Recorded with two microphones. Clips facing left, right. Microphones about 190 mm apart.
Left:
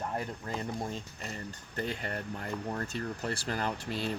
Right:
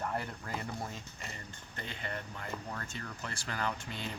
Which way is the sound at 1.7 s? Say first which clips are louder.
Left 6 dB; 40° left (ahead or behind).